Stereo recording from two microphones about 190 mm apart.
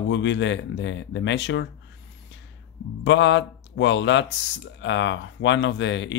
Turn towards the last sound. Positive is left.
turn(degrees=70)  # may be behind; listen again after turning